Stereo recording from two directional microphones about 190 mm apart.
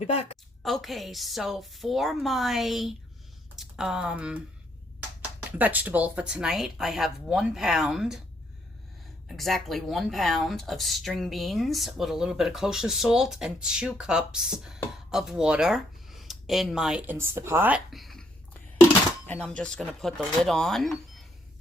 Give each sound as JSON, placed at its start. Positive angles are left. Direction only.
{"t": 0.0, "sound": "a woman's voice", "side_deg": 35}
{"t": 0.6, "sound": "speech", "side_deg": 0}
{"t": 5.5, "sound": "speech", "side_deg": -10}
{"t": 9.3, "sound": "speech", "side_deg": 0}
{"t": 19.3, "sound": "speech", "side_deg": 5}